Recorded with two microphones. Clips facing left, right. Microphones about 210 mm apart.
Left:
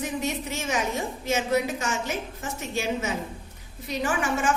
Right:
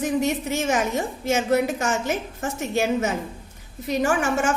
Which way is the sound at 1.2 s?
50° right (ahead or behind).